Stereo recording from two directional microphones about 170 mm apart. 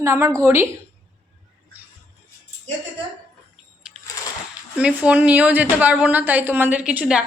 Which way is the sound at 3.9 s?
5° right (ahead or behind).